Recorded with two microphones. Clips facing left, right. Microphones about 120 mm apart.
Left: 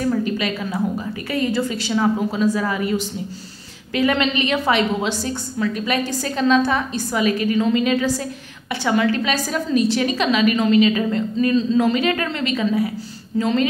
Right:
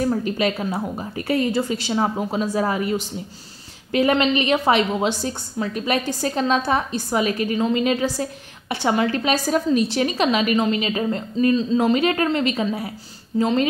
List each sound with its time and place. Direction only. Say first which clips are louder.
0.4 s a woman's voice: right 1 dB; 35° right (ahead or behind)